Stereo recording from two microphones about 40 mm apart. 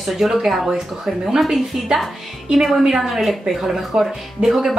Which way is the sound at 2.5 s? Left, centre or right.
Centre.